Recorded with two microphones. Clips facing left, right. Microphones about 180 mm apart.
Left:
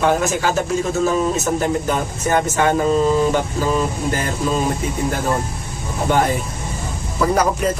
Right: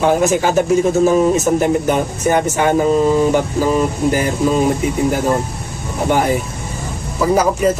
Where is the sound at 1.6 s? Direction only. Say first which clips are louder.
Right 5 dB; 15° right (ahead or behind).